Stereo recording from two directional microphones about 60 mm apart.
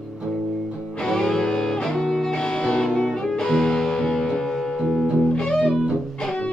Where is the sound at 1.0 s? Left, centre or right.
Centre.